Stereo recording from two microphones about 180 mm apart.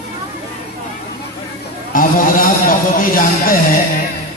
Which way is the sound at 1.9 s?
50° left (ahead or behind).